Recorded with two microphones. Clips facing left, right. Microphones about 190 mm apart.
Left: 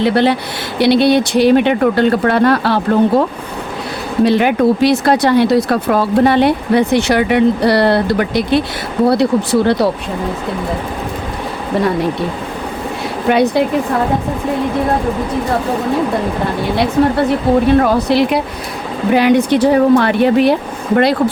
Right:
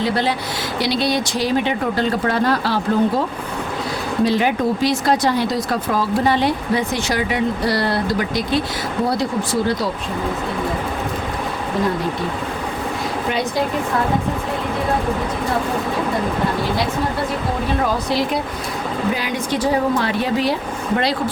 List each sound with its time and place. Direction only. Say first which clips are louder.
0.0 s speech: left 7 dB; 65° left (ahead or behind)
13.2 s speech: left 12 dB; 65° left (ahead or behind)
17.8 s speech: left 7 dB; 65° left (ahead or behind)